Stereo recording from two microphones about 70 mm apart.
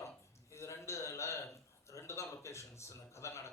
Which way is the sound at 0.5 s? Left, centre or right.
Left.